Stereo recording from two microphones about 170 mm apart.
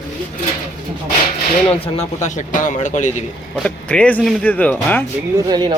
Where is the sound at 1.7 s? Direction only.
35° left (ahead or behind).